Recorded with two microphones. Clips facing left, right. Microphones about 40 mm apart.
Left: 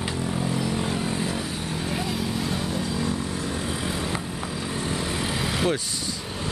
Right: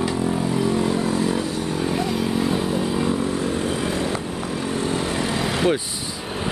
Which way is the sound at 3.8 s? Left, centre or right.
Centre.